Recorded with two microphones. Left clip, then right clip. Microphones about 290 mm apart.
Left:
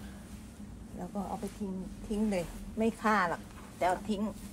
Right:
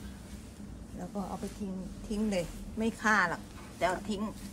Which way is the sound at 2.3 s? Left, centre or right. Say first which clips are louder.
Right 1 dB; centre.